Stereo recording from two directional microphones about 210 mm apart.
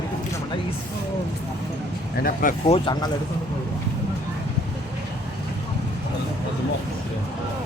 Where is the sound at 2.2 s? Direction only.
40° left (ahead or behind).